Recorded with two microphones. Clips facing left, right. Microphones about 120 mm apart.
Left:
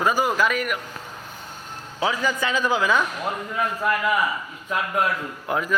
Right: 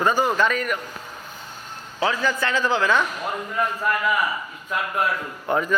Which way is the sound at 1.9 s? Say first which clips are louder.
Right 1 dB; 10° left (ahead or behind).